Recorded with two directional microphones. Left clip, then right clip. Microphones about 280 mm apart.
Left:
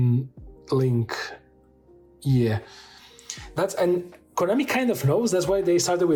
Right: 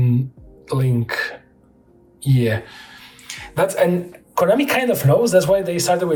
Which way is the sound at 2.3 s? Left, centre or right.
Centre.